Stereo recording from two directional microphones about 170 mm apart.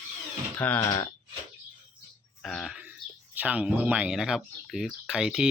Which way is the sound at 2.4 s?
Centre (ahead or behind).